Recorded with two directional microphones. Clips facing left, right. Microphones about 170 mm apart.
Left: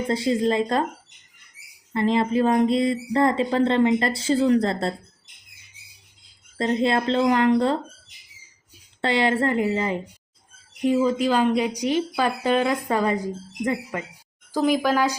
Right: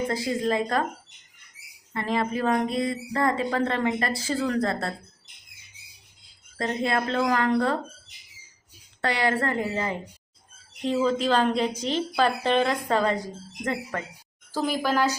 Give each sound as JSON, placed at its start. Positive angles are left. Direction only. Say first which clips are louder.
{"t": 0.1, "sound": "speech", "louder": "left 4 dB", "side_deg": 25}
{"t": 1.9, "sound": "speech", "louder": "left 6 dB", "side_deg": 25}
{"t": 6.6, "sound": "speech", "louder": "left 4 dB", "side_deg": 25}
{"t": 9.0, "sound": "a woman's voice", "louder": "left 4 dB", "side_deg": 25}
{"t": 14.6, "sound": "speech", "louder": "left 4 dB", "side_deg": -5}